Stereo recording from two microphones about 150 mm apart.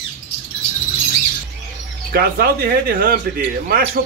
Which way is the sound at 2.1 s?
80° right.